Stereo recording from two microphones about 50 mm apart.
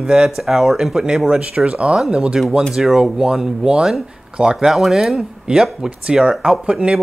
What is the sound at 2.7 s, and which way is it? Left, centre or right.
Speech, centre.